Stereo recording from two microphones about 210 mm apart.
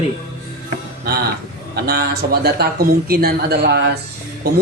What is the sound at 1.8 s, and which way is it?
Speech, 50° right (ahead or behind).